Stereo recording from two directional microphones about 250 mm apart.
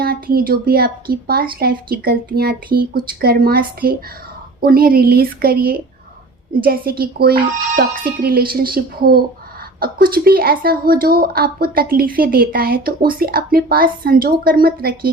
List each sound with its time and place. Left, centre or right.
0.0 s speech: right